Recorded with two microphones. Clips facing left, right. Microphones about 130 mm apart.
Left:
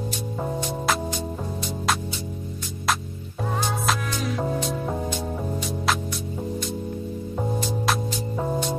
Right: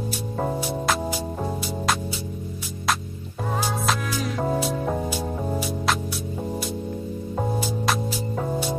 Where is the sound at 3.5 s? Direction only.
Centre (ahead or behind).